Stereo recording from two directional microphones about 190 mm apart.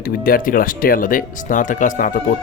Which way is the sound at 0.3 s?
50° left (ahead or behind).